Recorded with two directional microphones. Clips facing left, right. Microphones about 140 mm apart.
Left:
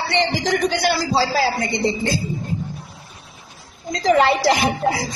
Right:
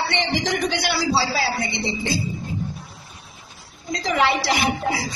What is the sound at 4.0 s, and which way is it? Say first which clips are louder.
A woman's voice: left 5 dB; 45° left (ahead or behind).